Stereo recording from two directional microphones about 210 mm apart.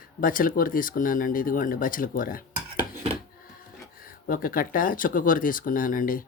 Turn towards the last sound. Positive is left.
turn(degrees=40)  # may be behind; listen again after turning